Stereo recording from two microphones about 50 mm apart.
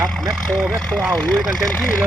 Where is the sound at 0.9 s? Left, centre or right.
Left.